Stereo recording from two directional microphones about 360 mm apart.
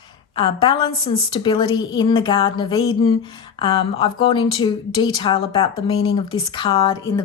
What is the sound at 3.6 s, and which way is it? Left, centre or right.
A woman's voice, centre.